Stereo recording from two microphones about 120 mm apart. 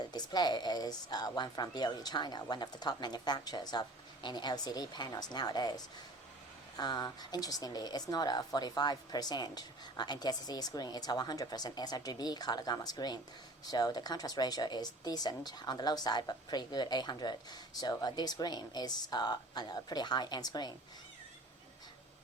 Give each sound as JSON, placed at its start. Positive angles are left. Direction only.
{"t": 0.1, "sound": "speech", "side_deg": 35}